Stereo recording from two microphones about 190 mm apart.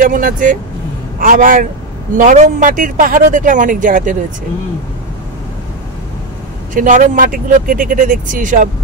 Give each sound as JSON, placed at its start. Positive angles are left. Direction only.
{"t": 0.0, "sound": "speech", "side_deg": -45}
{"t": 6.7, "sound": "speech", "side_deg": -45}